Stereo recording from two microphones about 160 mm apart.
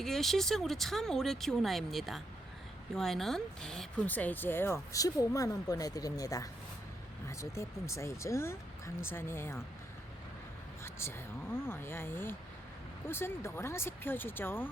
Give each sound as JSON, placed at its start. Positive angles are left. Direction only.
{"t": 0.0, "sound": "speech", "side_deg": 0}
{"t": 10.8, "sound": "speech", "side_deg": 15}